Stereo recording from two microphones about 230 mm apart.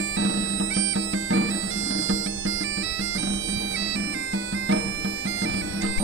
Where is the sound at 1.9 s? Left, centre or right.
Right.